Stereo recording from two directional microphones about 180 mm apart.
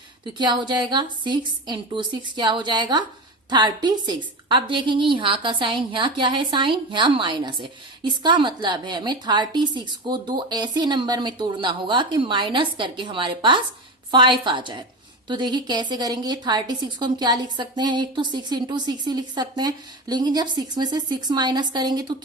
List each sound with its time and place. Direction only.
0.3 s a woman's voice: 25° right (ahead or behind)